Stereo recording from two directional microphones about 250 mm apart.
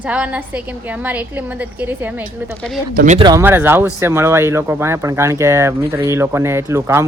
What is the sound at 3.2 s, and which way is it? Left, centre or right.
Speech, centre.